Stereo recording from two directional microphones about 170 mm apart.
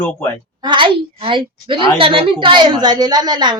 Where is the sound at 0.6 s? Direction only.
30° right (ahead or behind).